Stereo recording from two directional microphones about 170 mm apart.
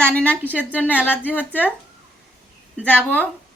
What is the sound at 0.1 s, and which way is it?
A woman's voice, 5° left (ahead or behind).